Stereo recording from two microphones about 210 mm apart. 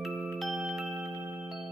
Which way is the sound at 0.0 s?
Centre (ahead or behind).